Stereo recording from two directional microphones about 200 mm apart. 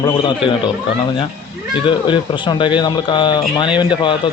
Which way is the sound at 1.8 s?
25° left (ahead or behind).